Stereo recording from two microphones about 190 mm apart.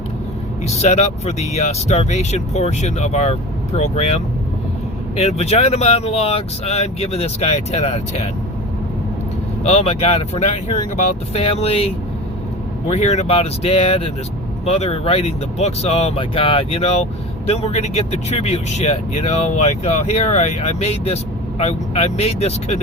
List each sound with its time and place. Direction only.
0.7 s speech: 35° left (ahead or behind)
9.6 s speech: 30° left (ahead or behind)
12.9 s speech: 35° left (ahead or behind)